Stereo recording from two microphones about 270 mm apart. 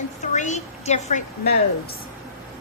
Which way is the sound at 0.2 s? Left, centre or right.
Left.